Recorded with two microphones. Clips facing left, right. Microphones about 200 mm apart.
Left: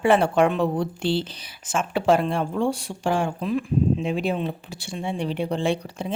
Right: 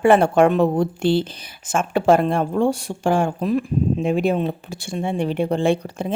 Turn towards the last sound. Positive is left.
turn(degrees=-50)  # may be behind; listen again after turning